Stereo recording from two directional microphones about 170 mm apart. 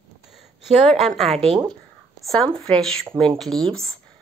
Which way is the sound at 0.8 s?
Centre (ahead or behind).